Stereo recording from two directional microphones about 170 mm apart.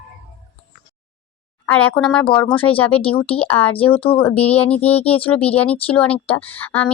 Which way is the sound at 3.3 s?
35° left (ahead or behind).